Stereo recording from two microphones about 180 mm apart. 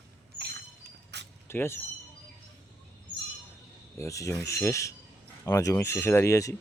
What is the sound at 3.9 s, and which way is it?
Speech, 15° left (ahead or behind).